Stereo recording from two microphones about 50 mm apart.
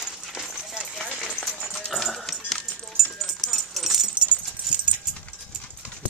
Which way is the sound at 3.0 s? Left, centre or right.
Centre.